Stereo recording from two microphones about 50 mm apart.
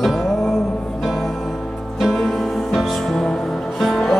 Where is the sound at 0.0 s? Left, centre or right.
Centre.